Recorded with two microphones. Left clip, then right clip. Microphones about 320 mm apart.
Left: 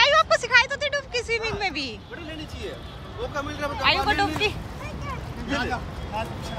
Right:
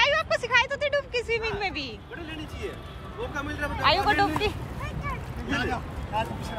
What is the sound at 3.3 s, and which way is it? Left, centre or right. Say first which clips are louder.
Speech: left 2 dB; centre.